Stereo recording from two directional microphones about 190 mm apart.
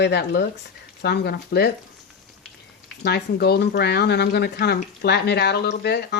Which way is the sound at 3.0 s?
60° left (ahead or behind).